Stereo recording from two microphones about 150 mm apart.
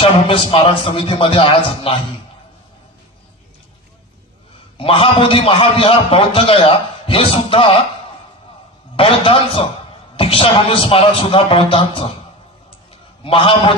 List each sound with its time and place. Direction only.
0.0 s a man's voice: 35° left (ahead or behind)
4.7 s a man's voice: 35° left (ahead or behind)
8.9 s a man's voice: 40° left (ahead or behind)
13.2 s a man's voice: 35° left (ahead or behind)